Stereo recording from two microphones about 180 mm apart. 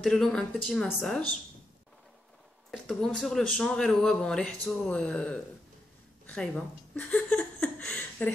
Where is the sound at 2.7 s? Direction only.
5° left (ahead or behind).